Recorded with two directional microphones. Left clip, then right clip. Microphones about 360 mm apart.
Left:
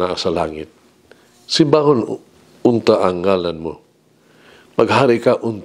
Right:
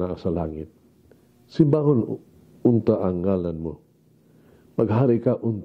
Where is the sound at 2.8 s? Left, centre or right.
Centre.